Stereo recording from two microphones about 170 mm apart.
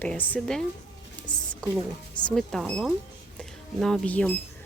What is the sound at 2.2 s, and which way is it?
Speech, 5° left (ahead or behind).